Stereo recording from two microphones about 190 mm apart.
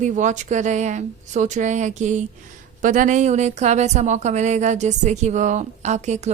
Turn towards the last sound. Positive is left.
turn(degrees=-35)  # may be behind; listen again after turning